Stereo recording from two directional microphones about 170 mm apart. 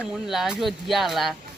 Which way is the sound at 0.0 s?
5° right (ahead or behind).